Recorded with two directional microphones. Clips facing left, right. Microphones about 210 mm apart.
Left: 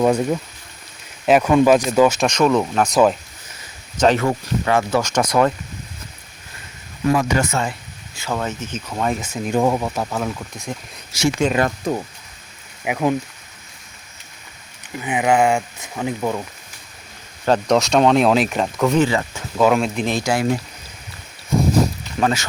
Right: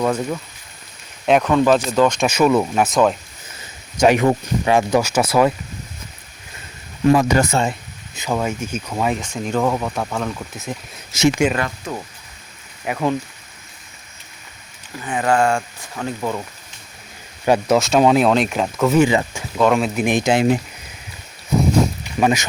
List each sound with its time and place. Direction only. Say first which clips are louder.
0.0 s speech: left 3 dB; 20° left (ahead or behind)
1.3 s speech: left 1 dB; 5° left (ahead or behind)
2.2 s speech: right 1 dB; 5° right (ahead or behind)
7.1 s speech: right 3 dB; 35° right (ahead or behind)
7.6 s speech: right 3 dB; 20° right (ahead or behind); by 9.2 s 5° right (ahead or behind)
9.2 s speech: left 1 dB; 10° left (ahead or behind); by 11.6 s 10° right (ahead or behind)
11.9 s speech: left 6 dB; 35° left (ahead or behind)
12.8 s speech: left 1 dB; 10° left (ahead or behind)
15.0 s speech: left 1 dB; 15° left (ahead or behind)
17.4 s speech: right 1 dB; 10° right (ahead or behind)
19.0 s speech: right 3 dB; 15° right (ahead or behind)
19.5 s speech: even; centre (ahead or behind)
20.1 s speech: right 6 dB; 20° right (ahead or behind)
22.2 s speech: right 2 dB; 15° right (ahead or behind)